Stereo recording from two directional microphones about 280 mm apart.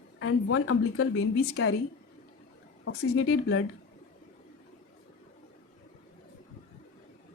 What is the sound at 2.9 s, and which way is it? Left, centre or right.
Speech, left.